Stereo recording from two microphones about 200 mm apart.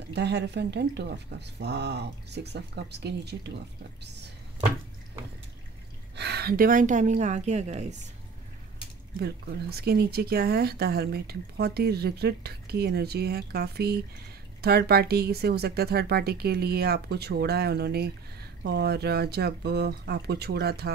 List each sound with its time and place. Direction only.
0.1 s speech: 55° right (ahead or behind)
6.1 s a woman's voice: 55° right (ahead or behind); by 7.8 s 35° right (ahead or behind)
9.2 s speech: 55° right (ahead or behind)